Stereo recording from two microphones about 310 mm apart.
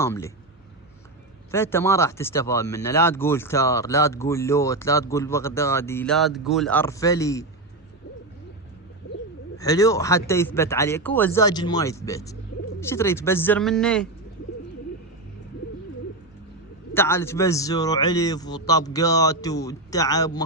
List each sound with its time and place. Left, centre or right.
0.0 s speech: centre
1.5 s speech: centre
9.6 s speech: centre
16.9 s speech: centre